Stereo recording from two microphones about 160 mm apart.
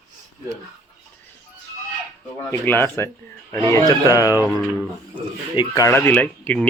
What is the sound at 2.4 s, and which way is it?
Speech, 15° left (ahead or behind).